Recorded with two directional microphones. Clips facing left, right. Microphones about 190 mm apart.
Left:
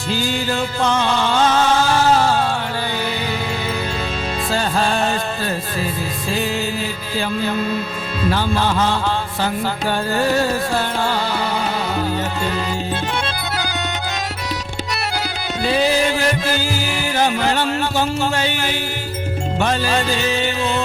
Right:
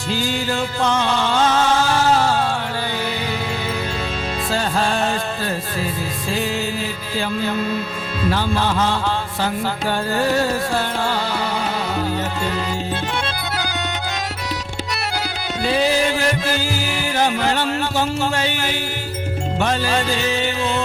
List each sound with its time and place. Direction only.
0.1 s music: 15° left (ahead or behind)
4.5 s music: 15° left (ahead or behind)
8.2 s music: 15° left (ahead or behind)
13.2 s music: 15° left (ahead or behind)
15.6 s music: 15° left (ahead or behind)